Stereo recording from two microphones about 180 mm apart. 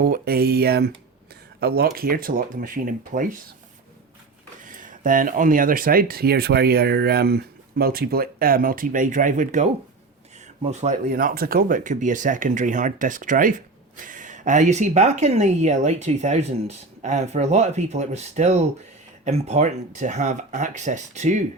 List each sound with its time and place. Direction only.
0.0 s speech: 55° right (ahead or behind)
4.6 s speech: 50° right (ahead or behind)
11.1 s speech: 50° right (ahead or behind)